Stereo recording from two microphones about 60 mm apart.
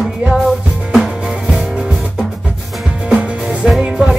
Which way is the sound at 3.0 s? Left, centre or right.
Centre.